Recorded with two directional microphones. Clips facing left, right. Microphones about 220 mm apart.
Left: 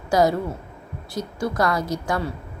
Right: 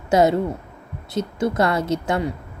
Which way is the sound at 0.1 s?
25° right (ahead or behind).